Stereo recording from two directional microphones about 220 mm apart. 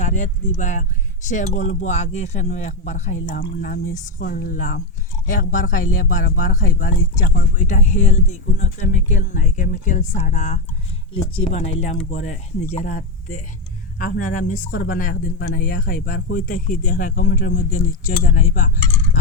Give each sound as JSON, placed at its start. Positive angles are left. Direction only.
{"t": 0.0, "sound": "a man's voice", "side_deg": 35}